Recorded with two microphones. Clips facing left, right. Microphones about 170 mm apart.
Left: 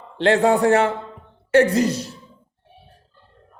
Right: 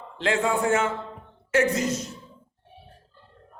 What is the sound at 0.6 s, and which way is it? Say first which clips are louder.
Speech: left 7 dB; 65° left (ahead or behind).